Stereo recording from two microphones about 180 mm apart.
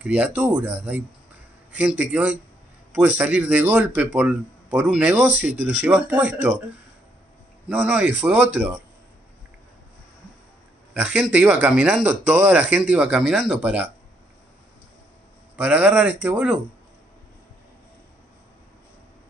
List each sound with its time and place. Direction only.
0.0 s a man's voice: 5° right (ahead or behind)
7.6 s a man's voice: 5° right (ahead or behind)
10.9 s a man's voice: 5° right (ahead or behind)
15.5 s a man's voice: 5° right (ahead or behind)